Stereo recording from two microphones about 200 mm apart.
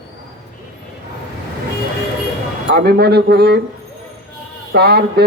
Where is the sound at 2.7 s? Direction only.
55° right (ahead or behind).